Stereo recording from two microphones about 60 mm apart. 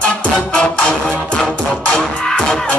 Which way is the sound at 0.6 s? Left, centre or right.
Centre.